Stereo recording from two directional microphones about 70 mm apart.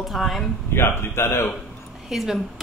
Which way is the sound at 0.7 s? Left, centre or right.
Left.